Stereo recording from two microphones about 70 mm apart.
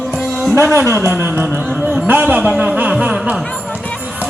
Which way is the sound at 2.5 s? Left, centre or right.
Centre.